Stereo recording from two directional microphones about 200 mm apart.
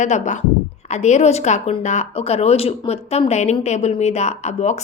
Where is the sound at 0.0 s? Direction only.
35° left (ahead or behind).